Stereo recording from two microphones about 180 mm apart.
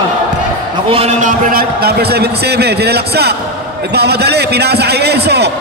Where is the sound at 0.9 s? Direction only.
35° right (ahead or behind).